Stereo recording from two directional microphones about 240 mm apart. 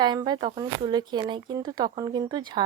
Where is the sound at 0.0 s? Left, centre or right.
Centre.